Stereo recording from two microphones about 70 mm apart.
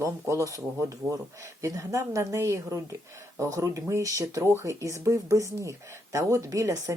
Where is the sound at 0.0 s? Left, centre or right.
Right.